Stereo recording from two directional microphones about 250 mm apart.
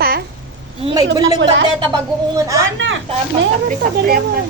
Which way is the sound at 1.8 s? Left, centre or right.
Centre.